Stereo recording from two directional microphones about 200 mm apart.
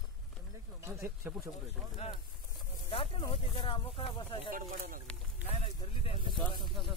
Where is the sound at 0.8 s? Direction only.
15° right (ahead or behind).